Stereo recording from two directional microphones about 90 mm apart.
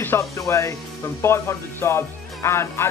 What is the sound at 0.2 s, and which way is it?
Speech, 35° left (ahead or behind).